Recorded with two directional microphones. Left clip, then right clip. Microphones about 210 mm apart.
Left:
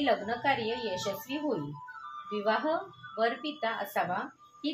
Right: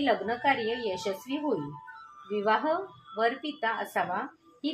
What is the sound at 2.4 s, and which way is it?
Speech, 25° right (ahead or behind).